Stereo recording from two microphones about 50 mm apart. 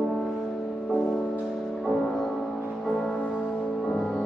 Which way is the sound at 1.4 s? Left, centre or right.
Centre.